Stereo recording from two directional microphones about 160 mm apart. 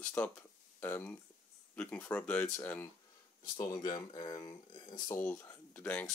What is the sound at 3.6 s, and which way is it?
Speech, 25° left (ahead or behind).